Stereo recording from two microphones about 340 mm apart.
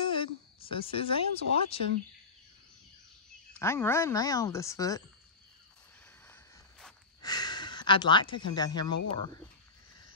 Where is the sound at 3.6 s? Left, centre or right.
Centre.